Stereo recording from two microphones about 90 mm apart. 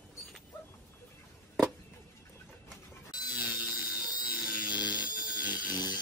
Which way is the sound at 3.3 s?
20° right (ahead or behind).